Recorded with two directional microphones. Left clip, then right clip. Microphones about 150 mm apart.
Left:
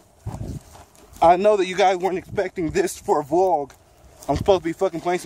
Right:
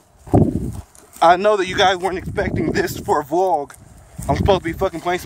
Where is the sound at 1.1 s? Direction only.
5° left (ahead or behind).